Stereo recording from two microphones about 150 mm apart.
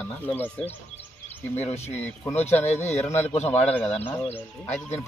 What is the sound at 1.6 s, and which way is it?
Speech, 45° left (ahead or behind).